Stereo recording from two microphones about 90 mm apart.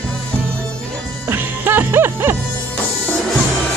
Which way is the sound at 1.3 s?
20° right (ahead or behind).